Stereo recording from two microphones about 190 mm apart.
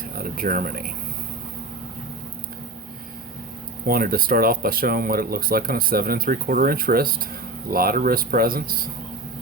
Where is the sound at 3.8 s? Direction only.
50° right (ahead or behind).